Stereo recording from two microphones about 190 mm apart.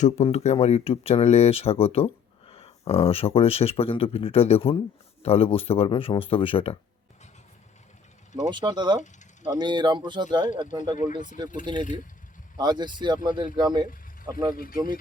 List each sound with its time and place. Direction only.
0.0 s speech: 35° left (ahead or behind)
8.4 s speech: 25° right (ahead or behind)
14.5 s speech: 50° left (ahead or behind)